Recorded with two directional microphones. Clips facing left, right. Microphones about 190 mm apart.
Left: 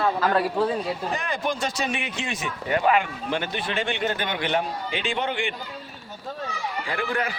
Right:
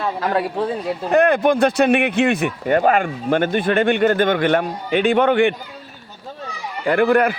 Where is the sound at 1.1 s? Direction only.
60° right (ahead or behind).